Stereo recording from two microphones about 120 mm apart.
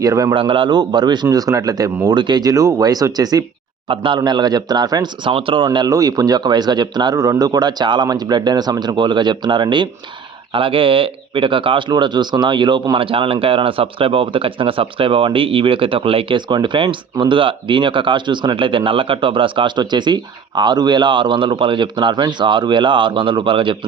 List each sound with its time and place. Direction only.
0.0 s a man's voice: 30° right (ahead or behind)
0.3 s speech: 45° right (ahead or behind)
3.8 s speech: 45° right (ahead or behind)
5.7 s speech: 35° right (ahead or behind)